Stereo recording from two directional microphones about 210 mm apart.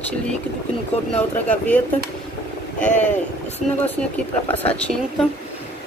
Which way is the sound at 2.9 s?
35° left (ahead or behind).